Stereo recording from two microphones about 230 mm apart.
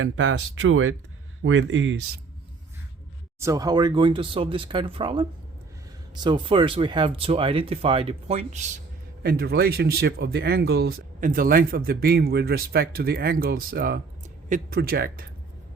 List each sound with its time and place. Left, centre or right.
0.0 s speech: right
3.4 s speech: centre
9.2 s speech: right